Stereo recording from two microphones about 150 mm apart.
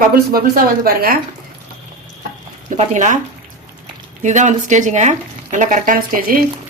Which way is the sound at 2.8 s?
55° right (ahead or behind).